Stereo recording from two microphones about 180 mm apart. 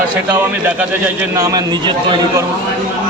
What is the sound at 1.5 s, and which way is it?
Speech, 25° right (ahead or behind).